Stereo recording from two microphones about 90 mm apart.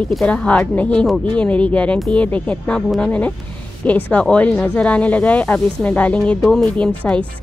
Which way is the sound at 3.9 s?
20° left (ahead or behind).